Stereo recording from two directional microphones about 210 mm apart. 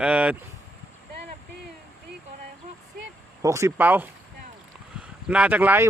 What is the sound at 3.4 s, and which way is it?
Speech, 15° right (ahead or behind).